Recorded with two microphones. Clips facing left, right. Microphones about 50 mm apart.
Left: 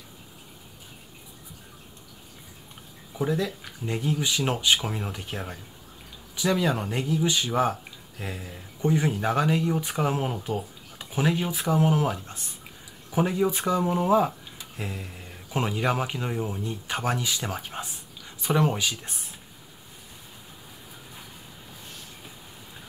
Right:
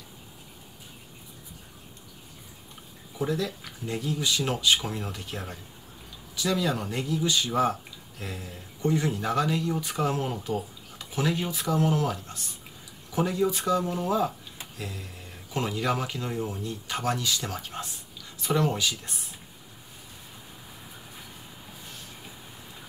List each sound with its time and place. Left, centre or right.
3.2 s speech: left